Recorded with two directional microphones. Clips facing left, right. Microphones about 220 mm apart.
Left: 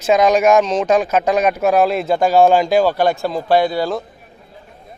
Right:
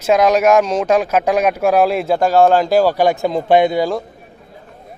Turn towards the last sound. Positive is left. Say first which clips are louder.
# right 2 dB
turn(degrees=-15)  # may be behind; listen again after turning